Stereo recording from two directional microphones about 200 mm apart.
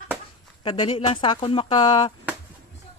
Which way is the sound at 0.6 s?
25° left (ahead or behind).